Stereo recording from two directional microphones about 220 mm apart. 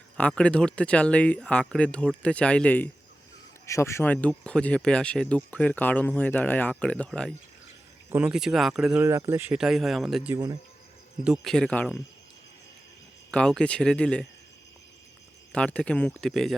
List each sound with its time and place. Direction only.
0.2 s speech: 5° left (ahead or behind)
10.3 s speech: 15° right (ahead or behind)
11.2 s speech: centre (ahead or behind)
13.3 s speech: 5° left (ahead or behind)
15.5 s speech: 5° left (ahead or behind)